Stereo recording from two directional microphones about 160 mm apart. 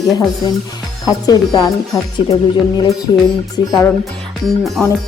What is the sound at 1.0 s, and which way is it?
Speech, 25° left (ahead or behind).